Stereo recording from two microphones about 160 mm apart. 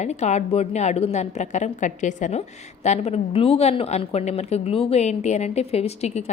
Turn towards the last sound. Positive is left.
turn(degrees=45)  # may be behind; listen again after turning